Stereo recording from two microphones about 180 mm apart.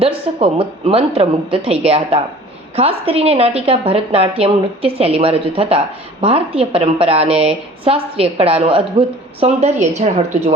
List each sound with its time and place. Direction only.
0.0 s a woman's voice: 30° right (ahead or behind)